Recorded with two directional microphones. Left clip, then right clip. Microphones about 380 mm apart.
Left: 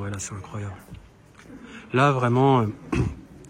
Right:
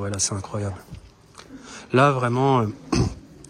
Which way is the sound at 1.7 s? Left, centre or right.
Centre.